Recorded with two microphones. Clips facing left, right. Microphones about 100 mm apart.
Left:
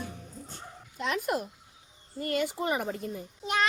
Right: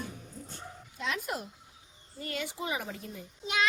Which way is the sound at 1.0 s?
45° left (ahead or behind).